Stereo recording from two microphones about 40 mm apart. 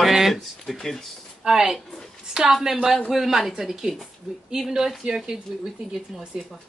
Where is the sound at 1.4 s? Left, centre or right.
Centre.